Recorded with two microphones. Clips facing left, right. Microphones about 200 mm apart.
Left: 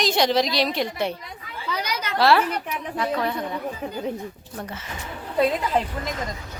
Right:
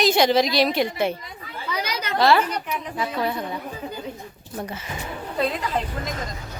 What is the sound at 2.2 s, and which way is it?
A woman's voice, centre (ahead or behind).